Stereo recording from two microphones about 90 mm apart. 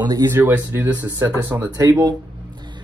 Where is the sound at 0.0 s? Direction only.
45° right (ahead or behind).